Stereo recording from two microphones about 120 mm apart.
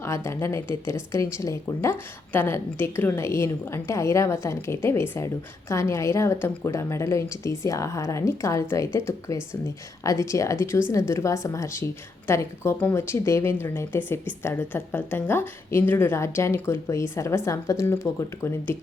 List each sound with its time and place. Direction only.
0.0 s a woman's voice: 25° left (ahead or behind)